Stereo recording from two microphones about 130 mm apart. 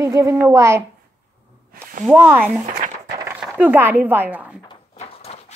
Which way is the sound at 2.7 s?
70° right (ahead or behind).